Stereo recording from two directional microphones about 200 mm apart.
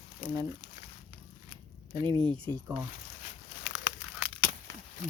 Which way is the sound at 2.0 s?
25° right (ahead or behind).